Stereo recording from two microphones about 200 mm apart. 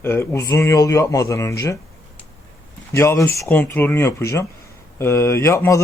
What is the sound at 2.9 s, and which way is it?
Speech, 10° left (ahead or behind).